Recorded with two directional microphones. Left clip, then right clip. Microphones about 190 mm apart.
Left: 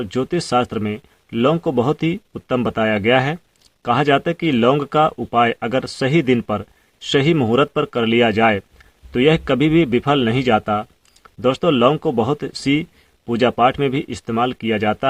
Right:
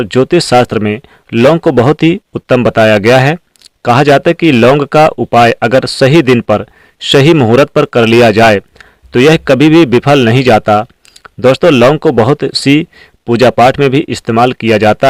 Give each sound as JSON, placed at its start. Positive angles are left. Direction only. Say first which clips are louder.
{"t": 0.0, "sound": "speech", "louder": "right 13 dB", "side_deg": -45}